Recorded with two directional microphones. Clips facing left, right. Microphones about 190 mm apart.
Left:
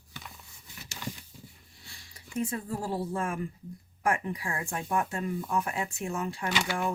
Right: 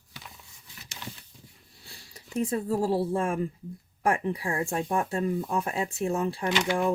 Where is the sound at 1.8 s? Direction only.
35° right (ahead or behind).